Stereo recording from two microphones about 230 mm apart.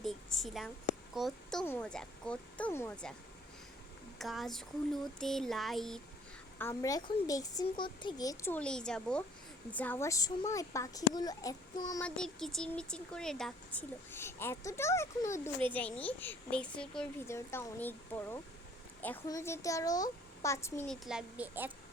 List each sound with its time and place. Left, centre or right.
0.0 s a sound: centre
1.1 s speech: centre
4.2 s speech: centre
6.6 s a woman's voice: centre
12.0 s a woman's voice: centre